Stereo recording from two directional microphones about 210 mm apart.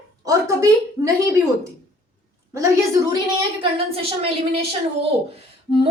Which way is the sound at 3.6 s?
25° right (ahead or behind).